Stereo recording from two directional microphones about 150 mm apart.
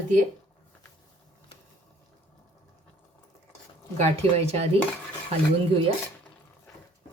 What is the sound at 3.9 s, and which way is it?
Speech, 45° right (ahead or behind).